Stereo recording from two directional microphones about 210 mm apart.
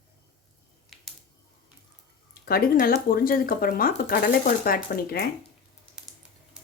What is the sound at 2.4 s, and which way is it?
Speech, 45° left (ahead or behind).